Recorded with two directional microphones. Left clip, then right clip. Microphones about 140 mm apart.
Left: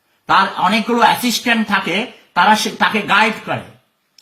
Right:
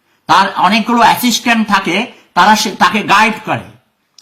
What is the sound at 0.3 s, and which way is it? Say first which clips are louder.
A man's voice: right 4 dB; 20° right (ahead or behind).